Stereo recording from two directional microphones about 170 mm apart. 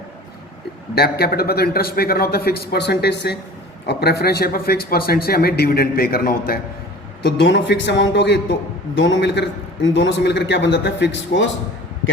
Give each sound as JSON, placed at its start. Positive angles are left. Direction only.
{"t": 1.2, "sound": "a man's voice", "side_deg": 65}
{"t": 7.3, "sound": "a man's voice", "side_deg": 90}